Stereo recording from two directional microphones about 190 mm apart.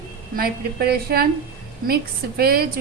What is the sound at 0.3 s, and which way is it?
Speech, 50° right (ahead or behind).